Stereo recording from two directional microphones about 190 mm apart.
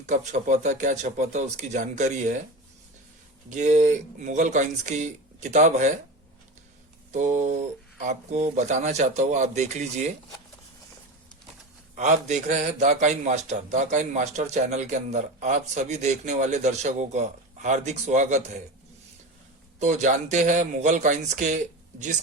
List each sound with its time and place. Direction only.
0.0 s a man's voice: 40° right (ahead or behind)
3.5 s a man's voice: 40° right (ahead or behind)
7.1 s a man's voice: 40° right (ahead or behind)
11.9 s a man's voice: 40° right (ahead or behind)
19.8 s a man's voice: 40° right (ahead or behind)